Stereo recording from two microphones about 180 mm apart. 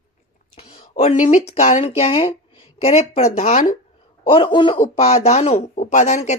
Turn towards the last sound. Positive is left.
turn(degrees=40)  # may be behind; listen again after turning